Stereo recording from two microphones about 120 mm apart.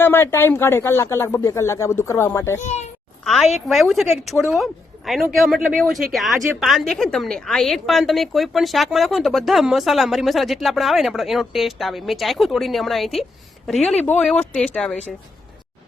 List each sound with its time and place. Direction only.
0.0 s speech: 20° left (ahead or behind)
2.6 s speech: 70° left (ahead or behind)
3.2 s a woman's voice: centre (ahead or behind)